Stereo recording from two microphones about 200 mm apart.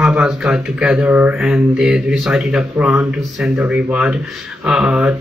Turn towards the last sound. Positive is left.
turn(degrees=-5)  # may be behind; listen again after turning